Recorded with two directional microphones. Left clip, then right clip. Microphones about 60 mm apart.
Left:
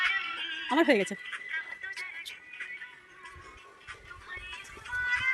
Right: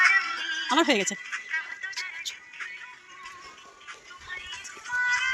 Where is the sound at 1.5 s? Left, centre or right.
Right.